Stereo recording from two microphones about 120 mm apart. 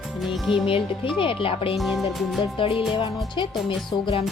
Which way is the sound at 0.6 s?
50° left (ahead or behind).